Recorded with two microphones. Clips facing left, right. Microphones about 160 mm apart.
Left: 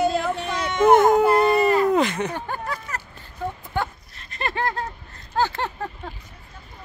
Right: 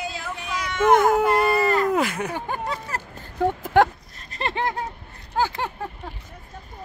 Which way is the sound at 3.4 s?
80° right.